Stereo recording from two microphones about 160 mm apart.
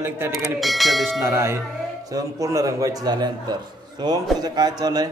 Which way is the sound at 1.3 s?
15° right (ahead or behind).